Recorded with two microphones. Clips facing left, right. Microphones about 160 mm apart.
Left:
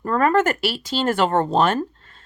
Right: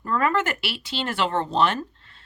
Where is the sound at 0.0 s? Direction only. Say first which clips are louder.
Left 5 dB; 45° left (ahead or behind).